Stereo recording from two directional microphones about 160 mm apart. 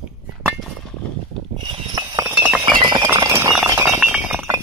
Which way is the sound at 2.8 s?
30° right (ahead or behind).